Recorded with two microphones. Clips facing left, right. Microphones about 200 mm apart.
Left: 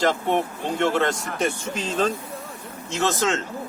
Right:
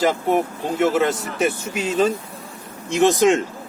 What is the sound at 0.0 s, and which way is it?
Speech, 5° right (ahead or behind).